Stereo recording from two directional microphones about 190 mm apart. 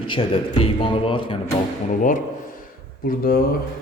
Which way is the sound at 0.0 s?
25° left (ahead or behind).